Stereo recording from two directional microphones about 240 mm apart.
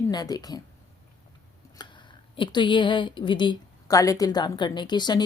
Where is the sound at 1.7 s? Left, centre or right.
Centre.